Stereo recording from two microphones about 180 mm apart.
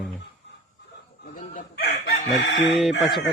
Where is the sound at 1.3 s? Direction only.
50° left (ahead or behind).